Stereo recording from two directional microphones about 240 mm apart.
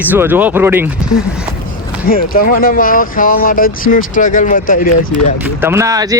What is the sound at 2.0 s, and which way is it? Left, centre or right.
Speech, left.